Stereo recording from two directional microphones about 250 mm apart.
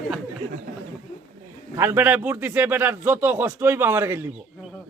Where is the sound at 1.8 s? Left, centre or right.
Centre.